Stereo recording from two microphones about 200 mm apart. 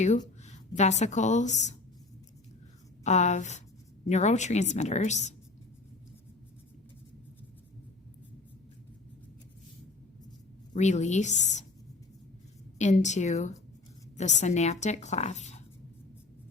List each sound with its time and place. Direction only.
0.4 s a woman's voice: 35° left (ahead or behind)
3.0 s speech: 35° left (ahead or behind)
10.8 s speech: 35° left (ahead or behind)
12.8 s speech: 35° left (ahead or behind)